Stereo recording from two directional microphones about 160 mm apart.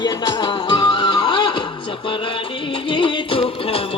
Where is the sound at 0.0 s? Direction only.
25° left (ahead or behind).